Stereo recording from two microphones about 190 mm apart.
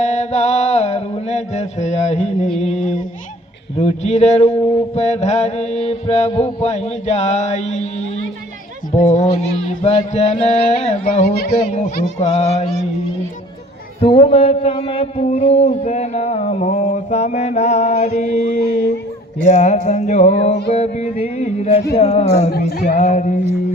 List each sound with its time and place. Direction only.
0.0 s mantra: 40° left (ahead or behind)
2.6 s a sound: 40° left (ahead or behind)
3.8 s a man's voice: 35° left (ahead or behind)
8.9 s a man's voice: 35° left (ahead or behind)
11.3 s a man's voice: 55° left (ahead or behind)
11.7 s a man's voice: 35° left (ahead or behind)
14.0 s a man's voice: 30° left (ahead or behind)